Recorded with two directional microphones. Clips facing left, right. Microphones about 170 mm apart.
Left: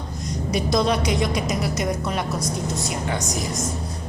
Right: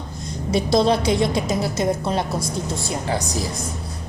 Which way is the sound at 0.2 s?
30° right (ahead or behind).